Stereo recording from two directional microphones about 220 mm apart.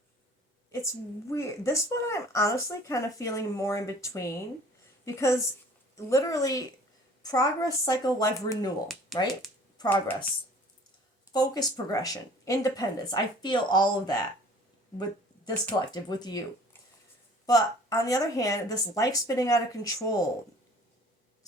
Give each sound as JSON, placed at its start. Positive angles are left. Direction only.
{"t": 0.7, "sound": "a woman's voice", "side_deg": 15}
{"t": 9.1, "sound": "speech", "side_deg": 0}
{"t": 9.7, "sound": "speech", "side_deg": 15}
{"t": 11.3, "sound": "a woman's voice", "side_deg": 15}
{"t": 15.6, "sound": "speech", "side_deg": 20}
{"t": 17.4, "sound": "a woman's voice", "side_deg": 15}